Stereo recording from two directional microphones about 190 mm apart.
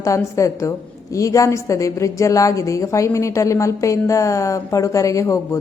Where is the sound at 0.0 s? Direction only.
15° left (ahead or behind).